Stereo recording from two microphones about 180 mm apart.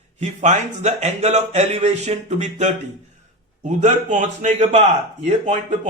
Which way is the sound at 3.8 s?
45° right (ahead or behind).